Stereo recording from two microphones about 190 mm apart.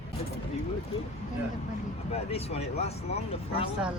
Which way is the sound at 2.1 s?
30° left (ahead or behind).